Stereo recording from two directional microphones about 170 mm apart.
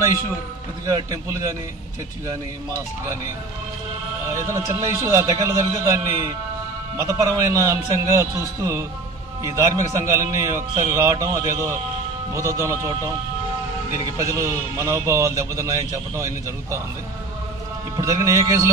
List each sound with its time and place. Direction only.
0.8 s a man's voice: 20° right (ahead or behind)
4.3 s a man's voice: 15° right (ahead or behind)
17.9 s a man's voice: 20° right (ahead or behind)